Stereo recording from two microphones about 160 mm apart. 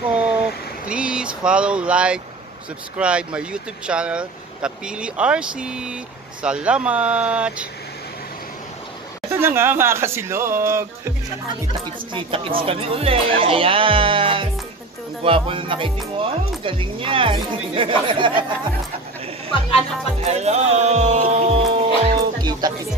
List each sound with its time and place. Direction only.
0.0 s speech: 5° right (ahead or behind)
9.4 s speech: 15° right (ahead or behind)
12.1 s speech: 35° right (ahead or behind)
20.2 s music: 40° right (ahead or behind); by 22.7 s 25° right (ahead or behind)